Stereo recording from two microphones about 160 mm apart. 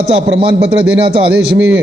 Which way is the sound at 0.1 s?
35° right (ahead or behind).